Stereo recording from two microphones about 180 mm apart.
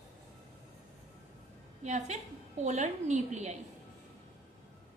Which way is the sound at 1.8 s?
40° right (ahead or behind).